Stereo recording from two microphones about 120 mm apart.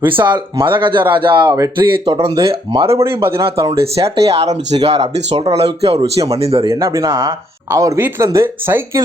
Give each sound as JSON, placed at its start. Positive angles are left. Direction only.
{"t": 0.1, "sound": "speech", "side_deg": -40}
{"t": 2.4, "sound": "speech", "side_deg": -50}
{"t": 3.2, "sound": "speech", "side_deg": -20}
{"t": 3.6, "sound": "speech", "side_deg": -55}
{"t": 6.7, "sound": "speech", "side_deg": -25}